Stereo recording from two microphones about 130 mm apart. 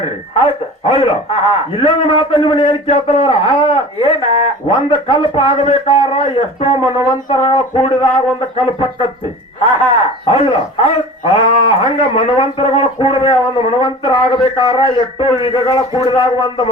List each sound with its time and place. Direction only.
0.3 s speech: 45° left (ahead or behind)
7.0 s a sound: 30° left (ahead or behind)
7.4 s speech: 40° left (ahead or behind)
10.2 s speech: 45° left (ahead or behind)